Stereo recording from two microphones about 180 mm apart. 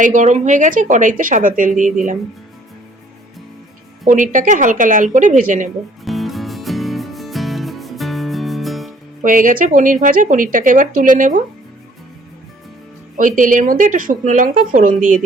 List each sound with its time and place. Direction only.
0.0 s speech: 45° right (ahead or behind)
4.0 s speech: 45° right (ahead or behind)
6.1 s music: centre (ahead or behind)
9.2 s speech: 45° right (ahead or behind)
13.1 s speech: 45° right (ahead or behind)